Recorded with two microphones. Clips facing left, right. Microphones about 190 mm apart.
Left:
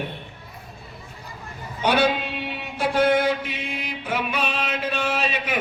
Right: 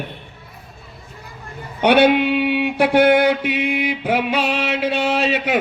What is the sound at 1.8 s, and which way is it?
Mantra, 65° right (ahead or behind).